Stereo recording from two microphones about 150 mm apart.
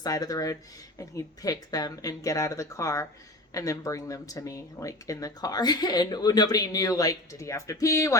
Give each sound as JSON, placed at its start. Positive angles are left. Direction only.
{"t": 0.0, "sound": "speech", "side_deg": 25}